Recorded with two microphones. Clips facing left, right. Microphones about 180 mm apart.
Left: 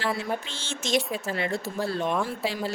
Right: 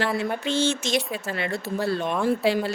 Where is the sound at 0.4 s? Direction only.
70° right (ahead or behind).